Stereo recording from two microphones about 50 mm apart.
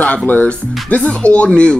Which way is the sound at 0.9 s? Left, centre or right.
Left.